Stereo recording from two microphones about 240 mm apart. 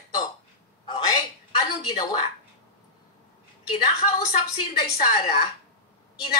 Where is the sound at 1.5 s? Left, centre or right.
Centre.